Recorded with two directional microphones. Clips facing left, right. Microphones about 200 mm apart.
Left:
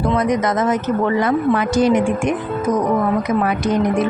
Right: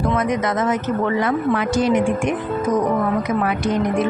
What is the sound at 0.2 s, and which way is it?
Speech, 40° left (ahead or behind).